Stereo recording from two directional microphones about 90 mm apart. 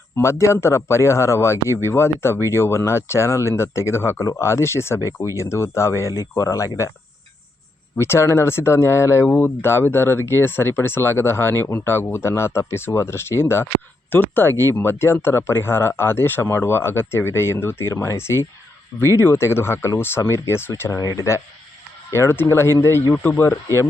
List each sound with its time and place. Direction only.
0.2 s speech: 30° left (ahead or behind)
7.9 s speech: 30° left (ahead or behind)